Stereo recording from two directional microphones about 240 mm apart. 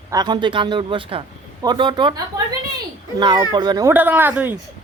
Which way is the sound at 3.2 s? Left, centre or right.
Centre.